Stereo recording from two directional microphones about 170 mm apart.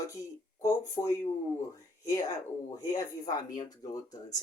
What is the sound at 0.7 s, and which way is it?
Speech, 20° left (ahead or behind).